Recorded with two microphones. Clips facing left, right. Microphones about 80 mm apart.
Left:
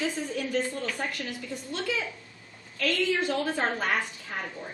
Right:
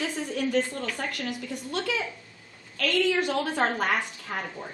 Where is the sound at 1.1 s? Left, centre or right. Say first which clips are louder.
Right 2 dB; right.